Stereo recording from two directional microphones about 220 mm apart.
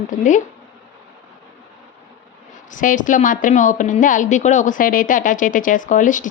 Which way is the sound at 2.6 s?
35° left (ahead or behind).